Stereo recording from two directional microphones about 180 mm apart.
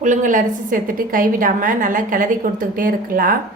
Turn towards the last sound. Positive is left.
turn(degrees=-50)  # may be behind; listen again after turning